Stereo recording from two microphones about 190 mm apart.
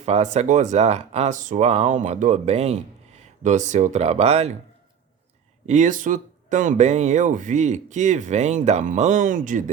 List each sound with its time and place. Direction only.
0.0 s speech: 35° right (ahead or behind)
5.6 s speech: 40° right (ahead or behind)